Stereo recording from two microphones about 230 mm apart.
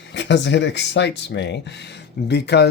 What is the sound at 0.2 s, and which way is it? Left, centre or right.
Speech, left.